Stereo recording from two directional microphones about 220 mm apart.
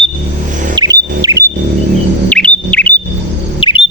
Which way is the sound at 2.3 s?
5° left (ahead or behind).